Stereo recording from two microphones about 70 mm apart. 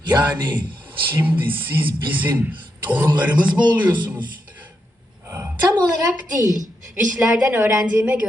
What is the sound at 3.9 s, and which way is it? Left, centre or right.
Speech, right.